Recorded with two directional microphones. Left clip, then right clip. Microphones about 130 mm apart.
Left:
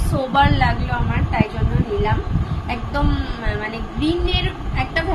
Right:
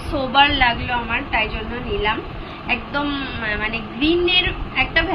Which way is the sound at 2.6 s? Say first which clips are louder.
Right 2 dB; 30° left (ahead or behind).